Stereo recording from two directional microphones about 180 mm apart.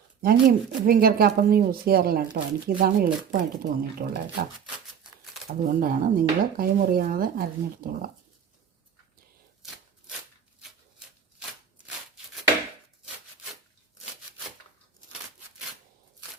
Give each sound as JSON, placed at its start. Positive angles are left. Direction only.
{"t": 0.2, "sound": "speech", "side_deg": -55}
{"t": 5.6, "sound": "speech", "side_deg": -50}